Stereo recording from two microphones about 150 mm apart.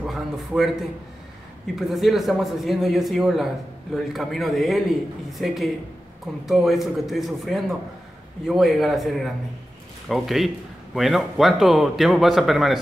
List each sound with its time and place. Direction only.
0.0 s a man's voice: centre (ahead or behind)